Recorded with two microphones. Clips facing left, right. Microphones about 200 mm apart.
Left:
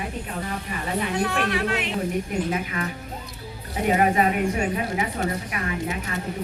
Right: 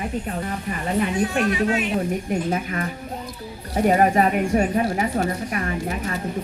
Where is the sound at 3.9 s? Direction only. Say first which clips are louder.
Even; 40° right (ahead or behind).